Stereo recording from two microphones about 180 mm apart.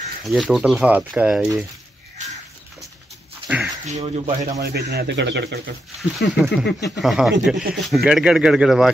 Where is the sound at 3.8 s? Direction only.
35° right (ahead or behind).